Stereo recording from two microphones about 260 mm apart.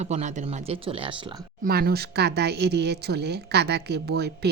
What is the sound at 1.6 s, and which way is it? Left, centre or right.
Speech, right.